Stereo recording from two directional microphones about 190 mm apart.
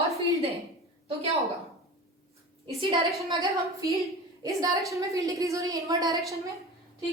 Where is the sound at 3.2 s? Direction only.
15° right (ahead or behind).